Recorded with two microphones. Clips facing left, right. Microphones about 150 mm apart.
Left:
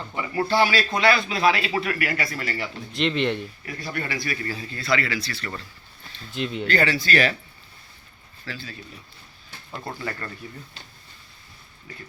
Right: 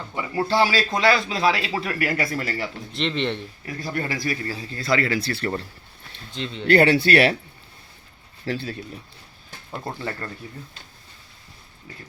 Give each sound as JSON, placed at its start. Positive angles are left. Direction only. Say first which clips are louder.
{"t": 0.2, "sound": "a man's voice", "louder": "right 1 dB", "side_deg": -25}
{"t": 2.9, "sound": "speech", "louder": "left 2 dB", "side_deg": 0}
{"t": 3.8, "sound": "a man's voice", "louder": "right 3 dB", "side_deg": -40}
{"t": 4.8, "sound": "speech", "louder": "right 3 dB", "side_deg": -45}
{"t": 6.3, "sound": "speech", "louder": "left 3 dB", "side_deg": 10}
{"t": 6.7, "sound": "speech", "louder": "right 8 dB", "side_deg": -60}
{"t": 8.4, "sound": "speech", "louder": "right 9 dB", "side_deg": -60}
{"t": 9.7, "sound": "speech", "louder": "right 2 dB", "side_deg": -20}